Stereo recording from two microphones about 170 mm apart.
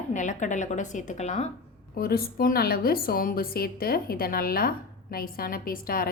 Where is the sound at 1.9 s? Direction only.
65° left (ahead or behind).